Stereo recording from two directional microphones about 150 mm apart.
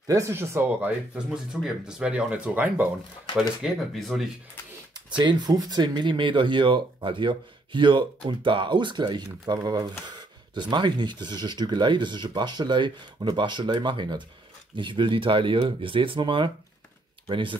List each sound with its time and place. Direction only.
0.0 s speech: 20° right (ahead or behind); by 4.3 s centre (ahead or behind)
4.9 s speech: 30° right (ahead or behind)